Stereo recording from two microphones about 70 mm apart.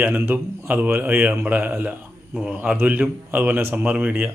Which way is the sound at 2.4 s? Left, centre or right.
Centre.